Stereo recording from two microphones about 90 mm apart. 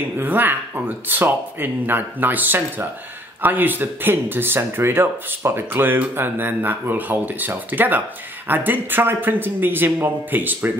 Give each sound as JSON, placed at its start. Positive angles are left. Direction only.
{"t": 0.2, "sound": "speech", "side_deg": -20}